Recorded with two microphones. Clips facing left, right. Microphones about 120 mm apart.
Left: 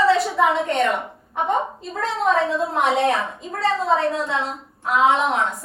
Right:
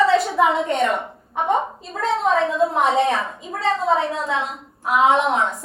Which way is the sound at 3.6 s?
Centre (ahead or behind).